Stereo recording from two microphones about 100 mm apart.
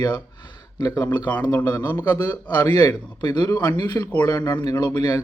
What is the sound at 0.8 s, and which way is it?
Speech, 35° left (ahead or behind).